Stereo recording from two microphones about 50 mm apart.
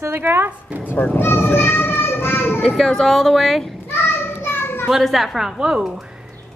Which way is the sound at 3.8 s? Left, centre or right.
Left.